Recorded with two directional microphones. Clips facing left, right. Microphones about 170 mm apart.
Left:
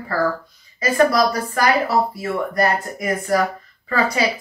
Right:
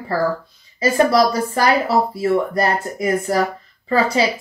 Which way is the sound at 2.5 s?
25° right (ahead or behind).